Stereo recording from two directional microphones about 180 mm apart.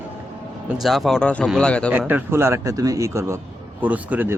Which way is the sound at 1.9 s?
10° right (ahead or behind).